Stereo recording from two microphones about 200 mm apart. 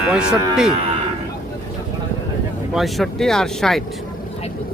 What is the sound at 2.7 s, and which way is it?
Speech, centre (ahead or behind).